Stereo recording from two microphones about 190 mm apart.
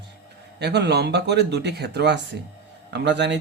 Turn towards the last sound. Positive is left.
turn(degrees=-65)  # may be behind; listen again after turning